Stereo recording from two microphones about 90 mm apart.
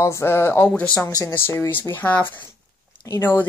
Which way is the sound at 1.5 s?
20° left (ahead or behind).